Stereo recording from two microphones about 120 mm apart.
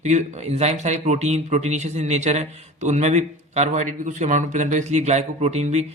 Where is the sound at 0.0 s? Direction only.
75° right (ahead or behind).